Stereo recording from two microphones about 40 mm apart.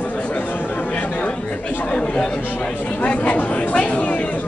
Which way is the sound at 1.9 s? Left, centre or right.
Left.